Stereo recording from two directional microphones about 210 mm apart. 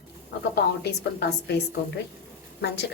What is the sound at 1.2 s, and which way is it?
Speech, 50° left (ahead or behind).